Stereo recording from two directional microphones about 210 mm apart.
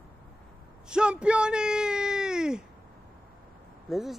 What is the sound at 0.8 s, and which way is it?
Bellow, 5° right (ahead or behind).